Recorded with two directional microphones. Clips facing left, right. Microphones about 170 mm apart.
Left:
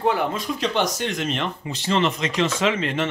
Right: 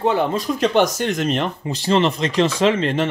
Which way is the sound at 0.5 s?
50° right (ahead or behind).